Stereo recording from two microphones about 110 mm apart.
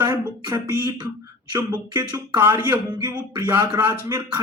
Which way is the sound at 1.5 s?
35° right (ahead or behind).